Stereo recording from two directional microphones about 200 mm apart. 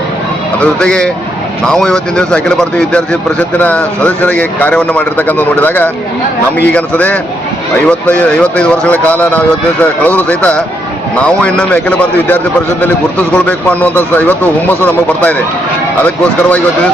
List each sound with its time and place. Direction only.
0.6 s speech: 5° left (ahead or behind)